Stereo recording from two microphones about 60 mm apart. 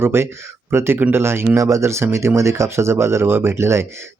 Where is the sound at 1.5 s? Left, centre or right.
Right.